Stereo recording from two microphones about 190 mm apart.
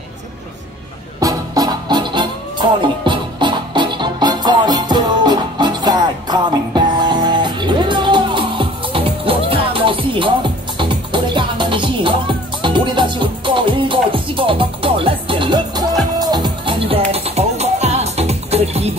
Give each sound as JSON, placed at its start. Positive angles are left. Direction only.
{"t": 1.2, "sound": "music", "side_deg": -20}